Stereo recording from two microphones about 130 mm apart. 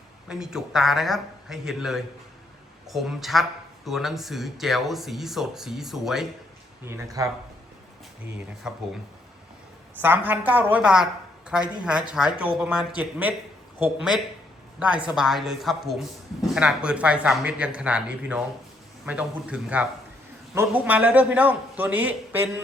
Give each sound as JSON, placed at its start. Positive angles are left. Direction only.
{"t": 0.3, "sound": "speech", "side_deg": -5}
{"t": 6.9, "sound": "speech", "side_deg": -25}
{"t": 8.2, "sound": "a woman's voice", "side_deg": -10}
{"t": 10.0, "sound": "a woman's voice", "side_deg": -15}